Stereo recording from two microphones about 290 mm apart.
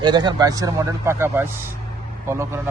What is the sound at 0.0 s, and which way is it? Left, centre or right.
Speech, centre.